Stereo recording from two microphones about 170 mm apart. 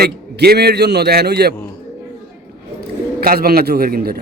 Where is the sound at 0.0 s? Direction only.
65° right (ahead or behind).